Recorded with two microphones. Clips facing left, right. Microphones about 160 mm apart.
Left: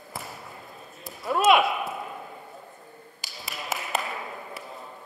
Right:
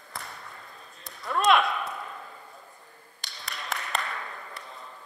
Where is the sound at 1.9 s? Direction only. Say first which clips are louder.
Left 3 dB; 15° left (ahead or behind).